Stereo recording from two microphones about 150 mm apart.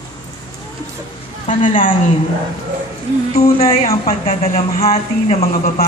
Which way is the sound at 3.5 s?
40° left (ahead or behind).